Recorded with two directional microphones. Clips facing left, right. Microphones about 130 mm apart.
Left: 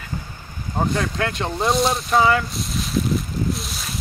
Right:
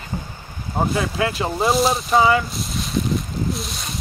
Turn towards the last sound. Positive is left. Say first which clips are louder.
# even
turn(degrees=0)  # may be behind; listen again after turning